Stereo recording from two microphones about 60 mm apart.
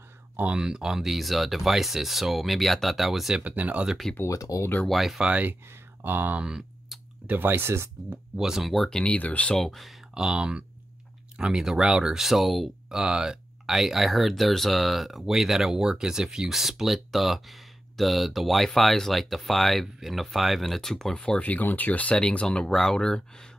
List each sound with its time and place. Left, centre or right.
0.6 s speech: centre
3.4 s speech: right
4.3 s speech: left
4.8 s speech: centre
5.2 s speech: right
6.4 s clicking: centre
7.2 s speech: right
8.4 s speech: centre
8.7 s speech: centre
9.0 s speech: left
9.6 s speech: centre
10.1 s speech: centre
13.0 s speech: centre
21.2 s speech: left